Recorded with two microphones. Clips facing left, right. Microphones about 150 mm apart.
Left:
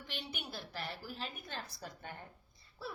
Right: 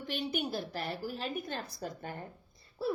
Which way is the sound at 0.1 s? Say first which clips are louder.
Right 11 dB; 45° right (ahead or behind).